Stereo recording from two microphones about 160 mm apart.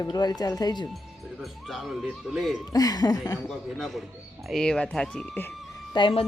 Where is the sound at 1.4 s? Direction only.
Centre (ahead or behind).